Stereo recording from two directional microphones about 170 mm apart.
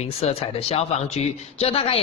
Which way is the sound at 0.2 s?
35° left (ahead or behind).